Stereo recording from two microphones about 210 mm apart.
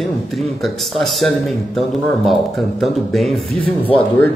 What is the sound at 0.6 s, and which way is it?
Speech, centre (ahead or behind).